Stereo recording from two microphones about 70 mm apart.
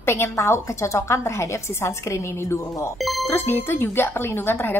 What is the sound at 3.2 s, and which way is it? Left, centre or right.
A woman's voice, left.